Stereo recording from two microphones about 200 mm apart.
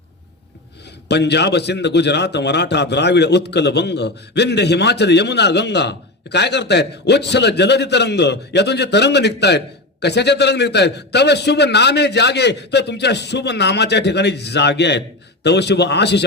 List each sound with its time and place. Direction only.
1.0 s a man's voice: 60° left (ahead or behind)